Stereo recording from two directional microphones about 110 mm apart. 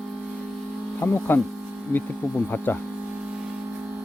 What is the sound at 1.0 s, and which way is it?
Speech, 20° left (ahead or behind).